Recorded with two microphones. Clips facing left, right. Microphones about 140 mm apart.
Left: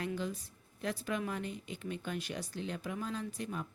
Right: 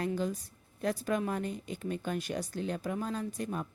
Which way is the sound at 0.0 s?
40° right (ahead or behind).